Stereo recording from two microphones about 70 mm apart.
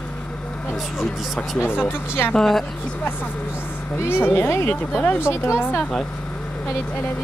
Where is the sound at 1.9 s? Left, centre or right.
Left.